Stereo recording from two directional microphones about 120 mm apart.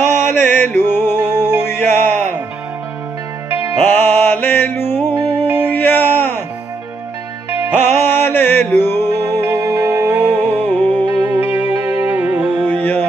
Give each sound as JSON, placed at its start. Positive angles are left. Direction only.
{"t": 0.0, "sound": "mantra", "side_deg": -85}
{"t": 0.5, "sound": "music", "side_deg": 20}
{"t": 3.4, "sound": "music", "side_deg": -20}
{"t": 3.8, "sound": "mantra", "side_deg": 15}
{"t": 5.1, "sound": "music", "side_deg": -35}
{"t": 5.7, "sound": "a sound", "side_deg": 15}
{"t": 7.7, "sound": "music", "side_deg": -75}
{"t": 8.0, "sound": "mantra", "side_deg": 15}
{"t": 9.2, "sound": "music", "side_deg": -25}
{"t": 10.6, "sound": "music", "side_deg": 15}
{"t": 11.2, "sound": "music", "side_deg": -15}
{"t": 12.6, "sound": "music", "side_deg": 15}